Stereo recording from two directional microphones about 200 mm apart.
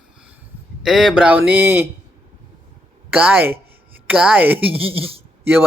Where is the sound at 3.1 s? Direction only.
5° right (ahead or behind).